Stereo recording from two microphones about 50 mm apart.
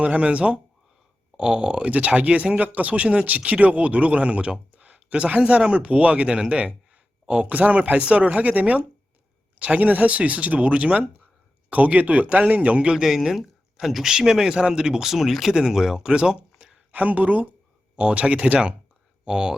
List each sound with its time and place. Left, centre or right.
0.0 s speech: right
13.0 s speech: centre
16.9 s speech: right